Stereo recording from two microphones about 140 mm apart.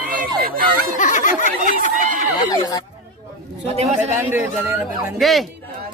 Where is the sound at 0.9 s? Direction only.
65° left (ahead or behind).